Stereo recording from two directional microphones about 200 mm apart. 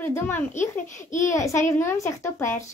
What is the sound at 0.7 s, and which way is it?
Speech, 40° left (ahead or behind).